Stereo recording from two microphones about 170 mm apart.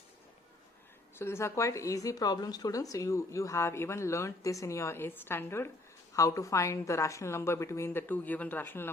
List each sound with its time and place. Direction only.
1.2 s speech: 15° left (ahead or behind)